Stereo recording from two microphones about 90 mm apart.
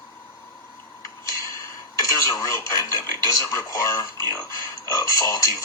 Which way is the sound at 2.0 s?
35° left (ahead or behind).